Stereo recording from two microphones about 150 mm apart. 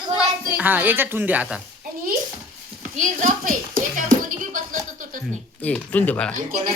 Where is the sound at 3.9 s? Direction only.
60° right (ahead or behind).